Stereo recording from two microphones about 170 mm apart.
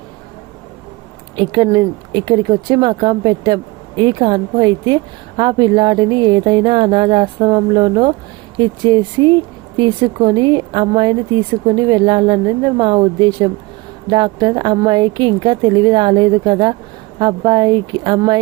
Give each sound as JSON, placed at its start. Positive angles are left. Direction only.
{"t": 1.4, "sound": "speech", "side_deg": -25}